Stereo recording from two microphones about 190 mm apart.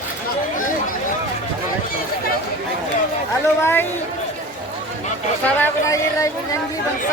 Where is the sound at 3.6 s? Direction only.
10° left (ahead or behind).